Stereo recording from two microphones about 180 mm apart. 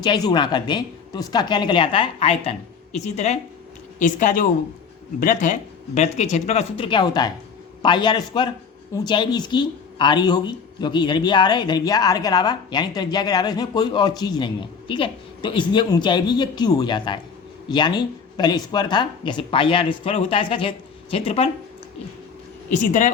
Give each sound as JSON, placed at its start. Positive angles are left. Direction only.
{"t": 0.0, "sound": "a man's voice", "side_deg": 25}
{"t": 22.7, "sound": "speech", "side_deg": 45}